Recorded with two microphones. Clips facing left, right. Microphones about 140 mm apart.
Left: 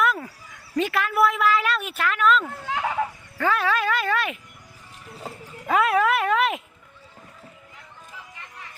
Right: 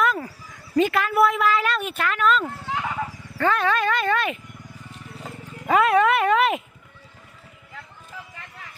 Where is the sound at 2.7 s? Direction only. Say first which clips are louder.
Left 3 dB; 55° left (ahead or behind).